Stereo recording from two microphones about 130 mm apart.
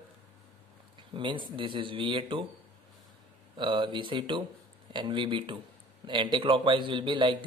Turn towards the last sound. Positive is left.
turn(degrees=-40)  # may be behind; listen again after turning